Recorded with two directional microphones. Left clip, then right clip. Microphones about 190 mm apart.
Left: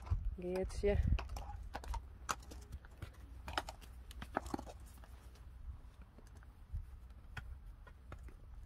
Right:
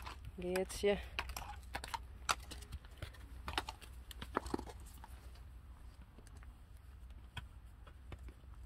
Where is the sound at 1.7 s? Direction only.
35° left (ahead or behind).